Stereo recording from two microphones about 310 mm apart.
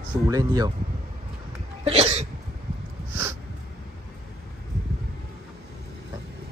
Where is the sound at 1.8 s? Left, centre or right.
Centre.